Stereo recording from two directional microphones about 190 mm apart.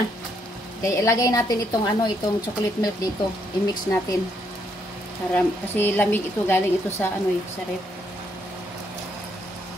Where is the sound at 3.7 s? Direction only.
15° left (ahead or behind).